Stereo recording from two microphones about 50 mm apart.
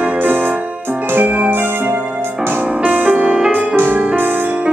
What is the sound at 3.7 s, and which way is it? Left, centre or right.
Music, right.